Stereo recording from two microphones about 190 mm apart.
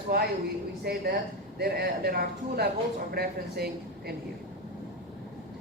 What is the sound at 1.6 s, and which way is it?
A woman's voice, 55° right (ahead or behind).